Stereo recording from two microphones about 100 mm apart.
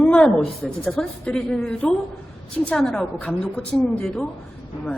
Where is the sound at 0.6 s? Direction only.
5° left (ahead or behind).